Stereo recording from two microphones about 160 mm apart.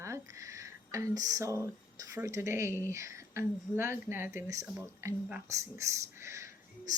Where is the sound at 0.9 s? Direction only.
20° right (ahead or behind).